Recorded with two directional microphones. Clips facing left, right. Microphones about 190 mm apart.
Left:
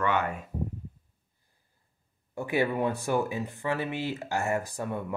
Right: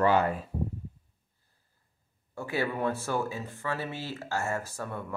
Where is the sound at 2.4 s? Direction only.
15° left (ahead or behind).